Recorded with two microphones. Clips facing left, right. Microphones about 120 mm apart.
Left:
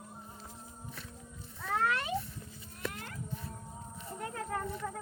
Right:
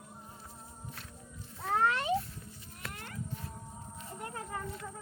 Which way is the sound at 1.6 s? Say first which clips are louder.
Right 3 dB; 30° right (ahead or behind).